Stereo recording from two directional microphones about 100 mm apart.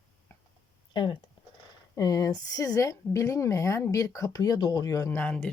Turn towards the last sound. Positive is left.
turn(degrees=20)  # may be behind; listen again after turning